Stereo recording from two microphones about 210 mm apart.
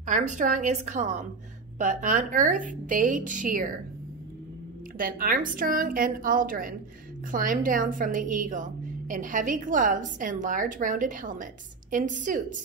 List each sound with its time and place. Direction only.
0.0 s a woman's voice: 35° right (ahead or behind)
4.9 s a woman's voice: 40° right (ahead or behind)